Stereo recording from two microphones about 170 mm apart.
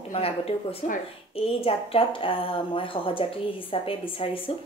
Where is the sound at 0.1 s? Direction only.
35° left (ahead or behind).